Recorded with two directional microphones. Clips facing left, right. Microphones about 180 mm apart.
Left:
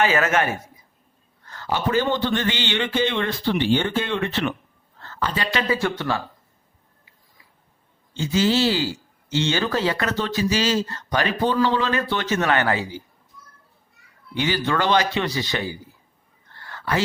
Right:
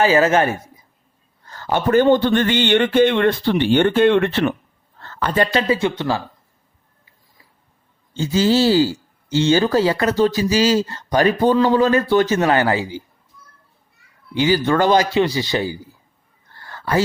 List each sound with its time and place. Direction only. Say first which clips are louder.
0.0 s speech: right 5 dB; 30° right (ahead or behind)
1.5 s a sound: right 2 dB; 35° right (ahead or behind)
1.7 s speech: right 8 dB; 55° right (ahead or behind)
5.6 s speech: right 4 dB; 25° right (ahead or behind)
8.1 s speech: right 4 dB; 35° right (ahead or behind)
14.3 s speech: right 6 dB; 35° right (ahead or behind)
16.6 s a sound: right 4 dB; 40° right (ahead or behind)